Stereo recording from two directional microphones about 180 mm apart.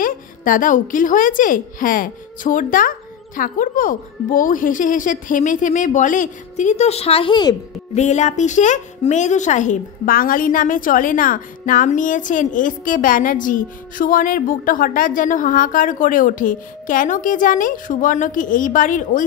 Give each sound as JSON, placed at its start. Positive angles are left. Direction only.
{"t": 0.0, "sound": "a woman's voice", "side_deg": 50}
{"t": 7.9, "sound": "a woman's voice", "side_deg": 40}